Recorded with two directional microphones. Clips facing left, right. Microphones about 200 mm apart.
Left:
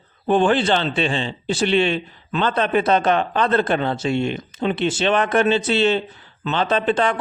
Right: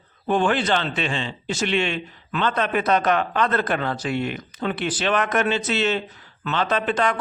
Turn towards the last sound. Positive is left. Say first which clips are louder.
# left 3 dB
turn(degrees=30)  # may be behind; listen again after turning